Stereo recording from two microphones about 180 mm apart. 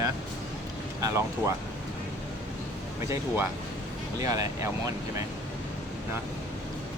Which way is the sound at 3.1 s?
10° right (ahead or behind).